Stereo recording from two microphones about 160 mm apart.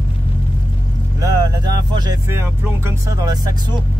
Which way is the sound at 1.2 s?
25° right (ahead or behind).